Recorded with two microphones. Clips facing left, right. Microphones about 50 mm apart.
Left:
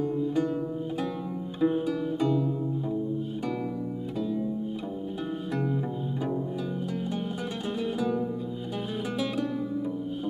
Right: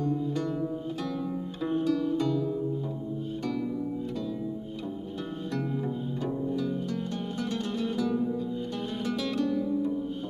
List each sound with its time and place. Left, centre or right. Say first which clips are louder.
0.0 s music: left 2 dB; centre
5.5 s music: left 1 dB; centre